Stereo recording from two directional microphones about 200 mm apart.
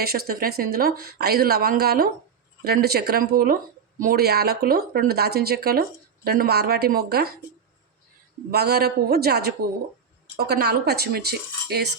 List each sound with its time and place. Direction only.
0.0 s speech: 50° right (ahead or behind)
8.4 s speech: 50° right (ahead or behind)